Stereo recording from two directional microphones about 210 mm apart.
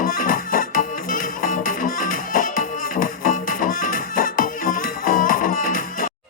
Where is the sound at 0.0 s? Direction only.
40° left (ahead or behind).